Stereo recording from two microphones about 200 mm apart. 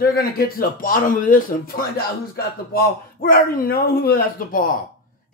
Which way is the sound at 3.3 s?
50° left (ahead or behind).